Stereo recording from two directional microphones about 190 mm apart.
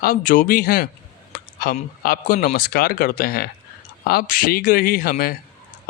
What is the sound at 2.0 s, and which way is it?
Speech, 50° left (ahead or behind).